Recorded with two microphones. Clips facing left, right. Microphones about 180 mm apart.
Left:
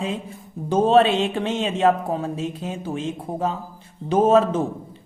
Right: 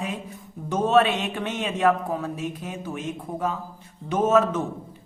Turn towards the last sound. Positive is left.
turn(degrees=30)  # may be behind; listen again after turning